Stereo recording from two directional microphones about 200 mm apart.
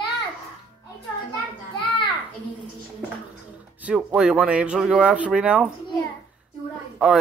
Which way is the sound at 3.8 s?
5° right (ahead or behind).